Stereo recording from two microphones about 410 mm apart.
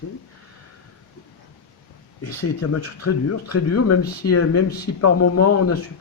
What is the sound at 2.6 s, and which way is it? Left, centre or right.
Speech, left.